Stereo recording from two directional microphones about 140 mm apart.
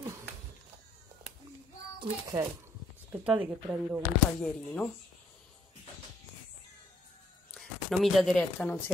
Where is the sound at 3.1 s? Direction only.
10° right (ahead or behind).